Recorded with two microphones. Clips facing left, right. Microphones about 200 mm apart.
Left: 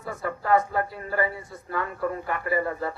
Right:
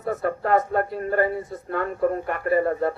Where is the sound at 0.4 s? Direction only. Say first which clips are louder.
Right 1 dB; 55° right (ahead or behind).